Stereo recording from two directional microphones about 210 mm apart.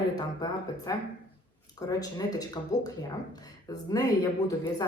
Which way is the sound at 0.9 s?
15° left (ahead or behind).